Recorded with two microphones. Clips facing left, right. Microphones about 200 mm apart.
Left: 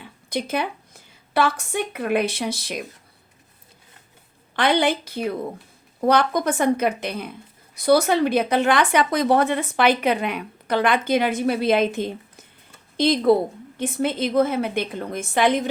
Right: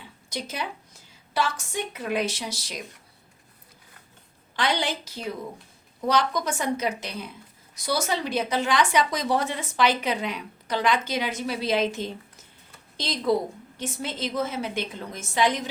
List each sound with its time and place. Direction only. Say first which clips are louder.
0.0 s a woman's voice: left 7 dB; 55° left (ahead or behind)
4.5 s a woman's voice: left 7 dB; 55° left (ahead or behind)